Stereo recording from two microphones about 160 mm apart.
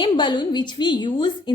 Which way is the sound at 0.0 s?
30° left (ahead or behind).